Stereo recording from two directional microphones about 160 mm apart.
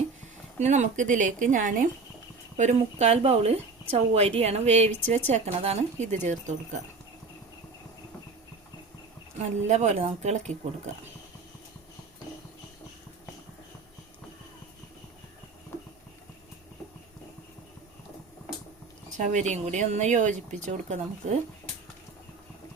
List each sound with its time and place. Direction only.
0.6 s speech: 50° right (ahead or behind)
9.6 s speech: 45° right (ahead or behind)
19.1 s speech: 50° right (ahead or behind)